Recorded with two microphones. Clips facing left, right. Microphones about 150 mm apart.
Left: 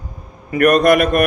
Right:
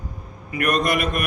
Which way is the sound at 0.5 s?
50° left (ahead or behind).